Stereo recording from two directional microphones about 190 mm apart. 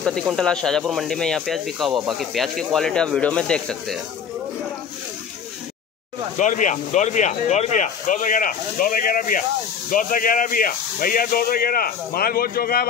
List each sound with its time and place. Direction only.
0.3 s speech: 5° left (ahead or behind)
6.3 s speech: 40° left (ahead or behind)